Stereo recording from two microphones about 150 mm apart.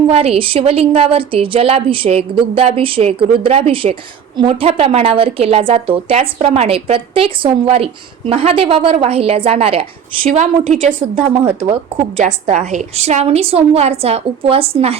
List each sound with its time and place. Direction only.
0.1 s a woman's voice: 40° right (ahead or behind)
10.2 s a woman's voice: 55° right (ahead or behind)
11.4 s a woman's voice: 40° right (ahead or behind)
12.2 s a woman's voice: 55° right (ahead or behind)